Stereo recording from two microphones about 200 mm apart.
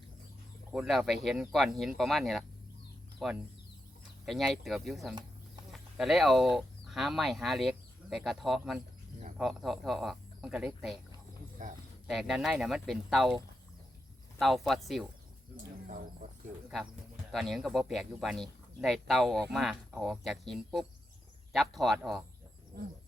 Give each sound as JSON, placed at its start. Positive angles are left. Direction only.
{"t": 0.7, "sound": "speech", "side_deg": 0}
{"t": 11.6, "sound": "speech", "side_deg": -40}
{"t": 12.0, "sound": "speech", "side_deg": 0}
{"t": 17.3, "sound": "speech", "side_deg": 0}
{"t": 22.7, "sound": "wild animals", "side_deg": -50}